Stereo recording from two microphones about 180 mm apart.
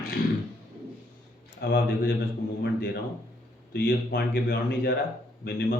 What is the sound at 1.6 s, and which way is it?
Speech, 65° left (ahead or behind).